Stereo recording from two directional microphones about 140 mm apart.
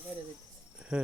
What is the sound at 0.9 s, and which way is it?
Speech, 5° right (ahead or behind).